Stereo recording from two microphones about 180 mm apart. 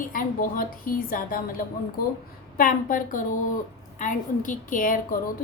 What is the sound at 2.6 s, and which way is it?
A woman's voice, 50° left (ahead or behind).